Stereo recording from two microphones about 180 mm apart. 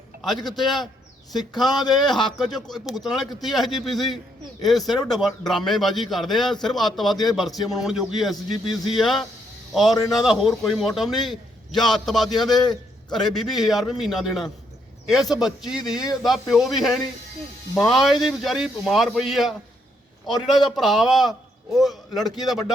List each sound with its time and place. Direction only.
0.2 s a man's voice: centre (ahead or behind)
8.5 s speech: 25° left (ahead or behind)
8.9 s a man's voice: centre (ahead or behind)
12.5 s a man's voice: 25° left (ahead or behind)
13.3 s a man's voice: centre (ahead or behind)